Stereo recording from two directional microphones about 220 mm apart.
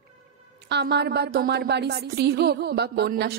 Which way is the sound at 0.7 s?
50° right (ahead or behind).